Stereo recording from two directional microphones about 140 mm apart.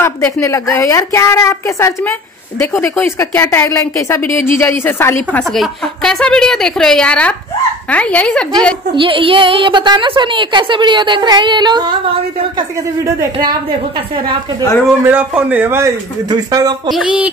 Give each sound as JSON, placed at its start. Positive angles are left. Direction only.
{"t": 0.0, "sound": "a woman's voice", "side_deg": 20}
{"t": 5.4, "sound": "a woman's voice", "side_deg": 0}
{"t": 8.9, "sound": "a woman's voice", "side_deg": -40}
{"t": 15.0, "sound": "a man's voice", "side_deg": -10}
{"t": 16.3, "sound": "a woman's voice", "side_deg": -25}
{"t": 16.9, "sound": "a man's voice", "side_deg": -5}